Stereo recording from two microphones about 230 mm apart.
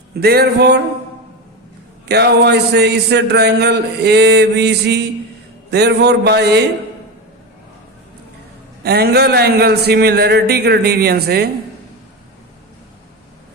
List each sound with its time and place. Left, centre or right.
0.1 s speech: right
2.0 s speech: right
8.8 s speech: right